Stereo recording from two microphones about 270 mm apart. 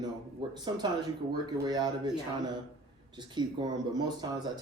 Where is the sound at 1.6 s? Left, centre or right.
Centre.